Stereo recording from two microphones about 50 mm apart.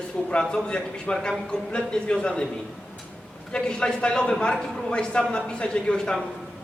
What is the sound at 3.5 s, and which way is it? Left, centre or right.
Speech, centre.